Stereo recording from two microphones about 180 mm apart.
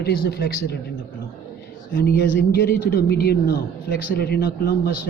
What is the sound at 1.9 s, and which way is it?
A man's voice, 60° left (ahead or behind).